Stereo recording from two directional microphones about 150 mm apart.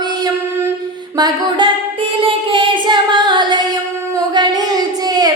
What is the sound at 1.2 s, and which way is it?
Music, 30° right (ahead or behind).